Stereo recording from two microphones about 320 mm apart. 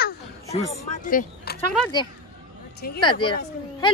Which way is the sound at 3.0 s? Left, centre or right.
Centre.